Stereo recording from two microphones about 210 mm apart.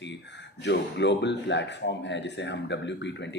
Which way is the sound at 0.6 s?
55° left (ahead or behind).